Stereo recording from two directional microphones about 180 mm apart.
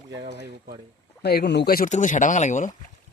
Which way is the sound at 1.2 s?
65° left (ahead or behind).